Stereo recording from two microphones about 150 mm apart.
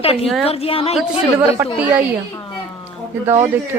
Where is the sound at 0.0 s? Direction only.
40° left (ahead or behind).